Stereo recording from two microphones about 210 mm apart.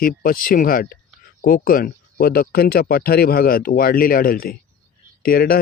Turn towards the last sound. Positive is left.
turn(degrees=45)  # may be behind; listen again after turning